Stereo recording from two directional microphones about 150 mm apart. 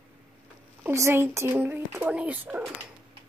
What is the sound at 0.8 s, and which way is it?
Speech, 15° right (ahead or behind).